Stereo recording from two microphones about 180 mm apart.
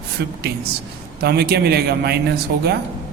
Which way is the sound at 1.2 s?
60° right (ahead or behind).